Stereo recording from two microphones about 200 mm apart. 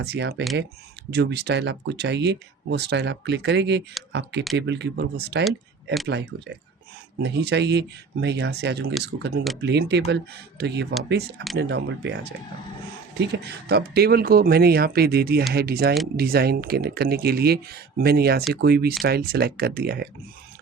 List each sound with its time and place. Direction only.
0.0 s speech: 55° right (ahead or behind)
5.5 s speech: centre (ahead or behind)
6.3 s speech: 55° right (ahead or behind)